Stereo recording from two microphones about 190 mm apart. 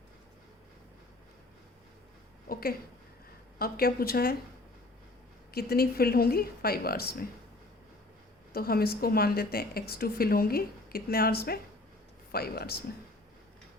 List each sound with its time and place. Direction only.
2.5 s a sound: 50° left (ahead or behind)
3.6 s a woman's voice: 50° left (ahead or behind)
5.5 s a woman's voice: 55° left (ahead or behind)
8.5 s a woman's voice: 50° left (ahead or behind)